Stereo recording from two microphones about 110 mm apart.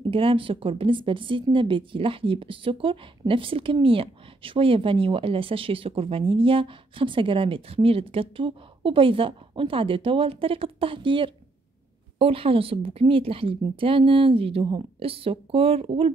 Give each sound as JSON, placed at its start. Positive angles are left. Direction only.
{"t": 0.1, "sound": "speech", "side_deg": -55}